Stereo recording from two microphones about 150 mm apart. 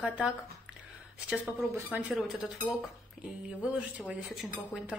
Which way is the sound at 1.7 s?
10° right (ahead or behind).